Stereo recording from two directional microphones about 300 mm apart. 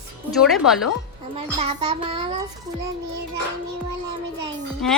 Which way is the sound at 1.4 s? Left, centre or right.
Centre.